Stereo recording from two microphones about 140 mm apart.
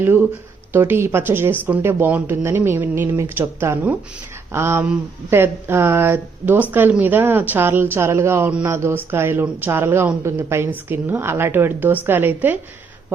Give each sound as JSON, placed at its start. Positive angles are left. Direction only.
{"t": 0.0, "sound": "speech", "side_deg": -15}